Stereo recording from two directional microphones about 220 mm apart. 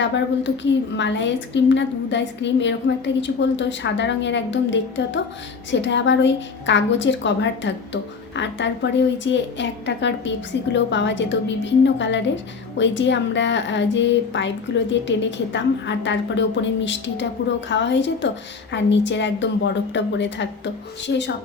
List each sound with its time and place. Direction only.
0.0 s a woman's voice: 55° left (ahead or behind)